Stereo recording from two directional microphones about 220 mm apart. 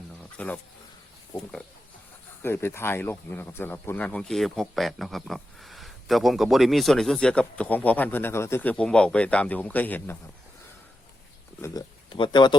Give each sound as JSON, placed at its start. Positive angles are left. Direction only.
{"t": 0.3, "sound": "speech", "side_deg": 5}
{"t": 11.6, "sound": "speech", "side_deg": 15}